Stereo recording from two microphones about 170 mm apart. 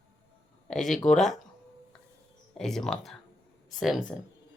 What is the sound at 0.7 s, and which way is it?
Speech, 5° left (ahead or behind).